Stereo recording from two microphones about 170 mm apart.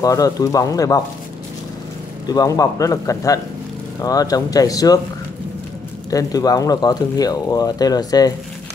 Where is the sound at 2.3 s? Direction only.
20° left (ahead or behind).